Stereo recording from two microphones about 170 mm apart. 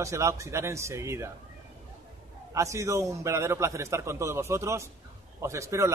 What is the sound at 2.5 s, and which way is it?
A man's voice, 15° right (ahead or behind).